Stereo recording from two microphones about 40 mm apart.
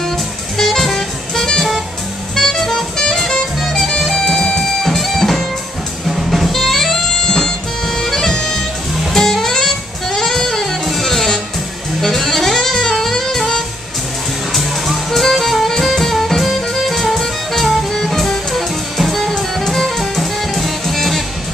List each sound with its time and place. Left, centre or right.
0.6 s music: centre
4.1 s music: centre
4.6 s music: centre
12.0 s saxophone: centre
14.5 s music: centre